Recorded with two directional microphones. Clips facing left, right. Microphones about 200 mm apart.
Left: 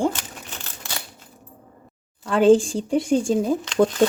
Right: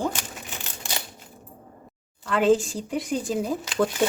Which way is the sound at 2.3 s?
30° left (ahead or behind).